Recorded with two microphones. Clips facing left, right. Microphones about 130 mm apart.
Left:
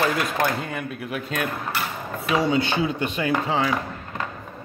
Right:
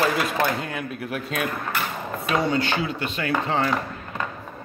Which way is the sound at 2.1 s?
Centre (ahead or behind).